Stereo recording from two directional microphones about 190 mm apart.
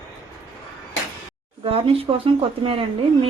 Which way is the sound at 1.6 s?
30° right (ahead or behind).